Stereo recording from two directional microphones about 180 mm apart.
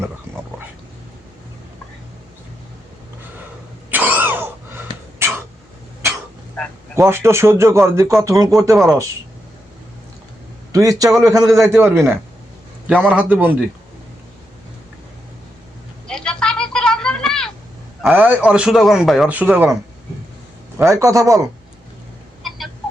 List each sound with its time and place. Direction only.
3.9 s throat clearing: 10° right (ahead or behind)
5.2 s a sound: 15° right (ahead or behind)
6.9 s a man's voice: 15° right (ahead or behind)
10.7 s a man's voice: 20° right (ahead or behind)
16.0 s vehicle: 5° left (ahead or behind)
18.0 s speech: 10° right (ahead or behind)
20.7 s a man's voice: 15° right (ahead or behind)
22.4 s chicken: centre (ahead or behind)